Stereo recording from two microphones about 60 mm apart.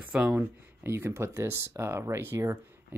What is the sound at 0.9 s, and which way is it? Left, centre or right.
Speech, right.